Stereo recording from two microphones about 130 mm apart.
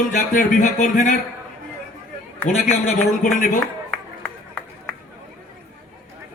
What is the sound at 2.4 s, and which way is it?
A man's voice, 70° left (ahead or behind).